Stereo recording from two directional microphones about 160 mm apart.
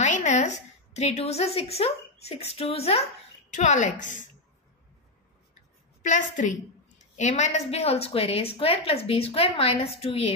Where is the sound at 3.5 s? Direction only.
50° left (ahead or behind).